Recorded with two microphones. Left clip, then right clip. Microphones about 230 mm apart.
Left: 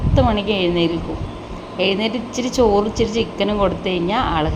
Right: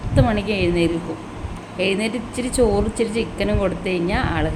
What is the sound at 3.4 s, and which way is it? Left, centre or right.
Speech, centre.